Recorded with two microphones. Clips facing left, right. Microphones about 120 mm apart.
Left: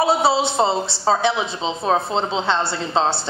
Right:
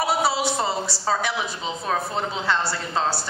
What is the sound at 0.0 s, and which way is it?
A woman's voice, 25° left (ahead or behind).